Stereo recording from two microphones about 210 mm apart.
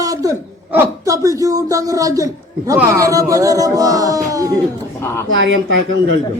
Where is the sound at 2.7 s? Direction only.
15° right (ahead or behind).